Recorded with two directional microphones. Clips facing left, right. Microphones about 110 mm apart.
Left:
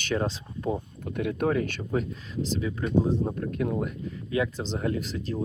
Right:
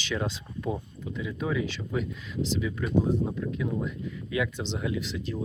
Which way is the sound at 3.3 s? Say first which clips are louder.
Left 2 dB; 55° left (ahead or behind).